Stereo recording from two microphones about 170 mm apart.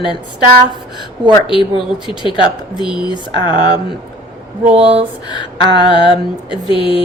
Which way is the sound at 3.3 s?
30° left (ahead or behind).